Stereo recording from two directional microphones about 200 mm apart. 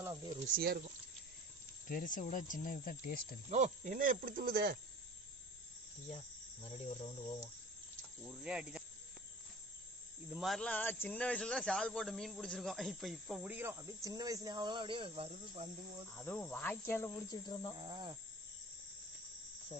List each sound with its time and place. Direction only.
0.3 s speech: 40° right (ahead or behind)
1.9 s speech: 40° left (ahead or behind)
3.5 s speech: 40° right (ahead or behind)
6.6 s speech: 30° left (ahead or behind)
8.2 s speech: 5° right (ahead or behind)
10.2 s speech: 5° right (ahead or behind); by 15.7 s 30° right (ahead or behind)
16.1 s cricket: 10° left (ahead or behind)
17.7 s cricket: 25° right (ahead or behind)